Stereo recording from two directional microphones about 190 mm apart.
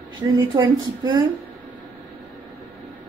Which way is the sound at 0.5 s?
20° right (ahead or behind).